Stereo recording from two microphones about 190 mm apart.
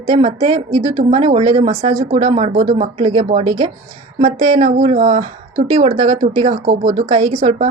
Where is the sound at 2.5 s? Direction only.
50° right (ahead or behind).